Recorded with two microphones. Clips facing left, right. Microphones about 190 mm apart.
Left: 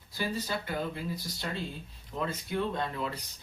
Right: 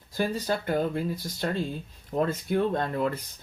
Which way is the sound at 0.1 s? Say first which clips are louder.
Right 6 dB; 50° right (ahead or behind).